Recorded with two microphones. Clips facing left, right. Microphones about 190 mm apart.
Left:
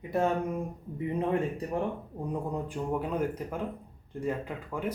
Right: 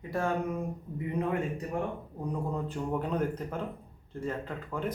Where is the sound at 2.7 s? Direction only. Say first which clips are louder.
Left 1 dB; 10° left (ahead or behind).